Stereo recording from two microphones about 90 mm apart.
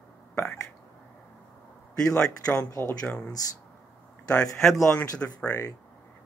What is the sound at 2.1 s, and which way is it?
Speech, 5° left (ahead or behind).